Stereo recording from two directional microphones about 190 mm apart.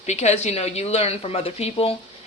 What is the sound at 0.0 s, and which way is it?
Speech, 35° left (ahead or behind).